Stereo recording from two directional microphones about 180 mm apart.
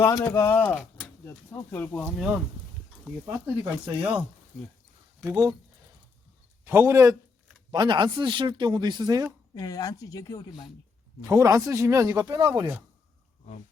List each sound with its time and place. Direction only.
0.0 s speech: 20° left (ahead or behind)
3.6 s speech: 5° right (ahead or behind)
5.2 s speech: 15° right (ahead or behind)
6.7 s speech: 15° right (ahead or behind)
9.6 s speech: 20° left (ahead or behind)
11.3 s speech: 20° right (ahead or behind)